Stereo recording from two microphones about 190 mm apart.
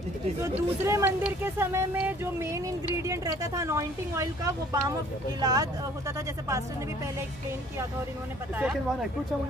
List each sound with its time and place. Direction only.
0.4 s speech: 15° right (ahead or behind)